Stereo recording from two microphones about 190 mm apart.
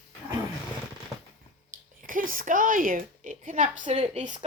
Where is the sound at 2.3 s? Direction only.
45° right (ahead or behind).